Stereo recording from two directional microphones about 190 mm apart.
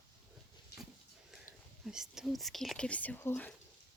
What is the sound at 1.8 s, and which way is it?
Speech, 5° right (ahead or behind).